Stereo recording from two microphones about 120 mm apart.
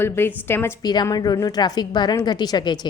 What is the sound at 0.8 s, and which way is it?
A woman's voice, 35° left (ahead or behind).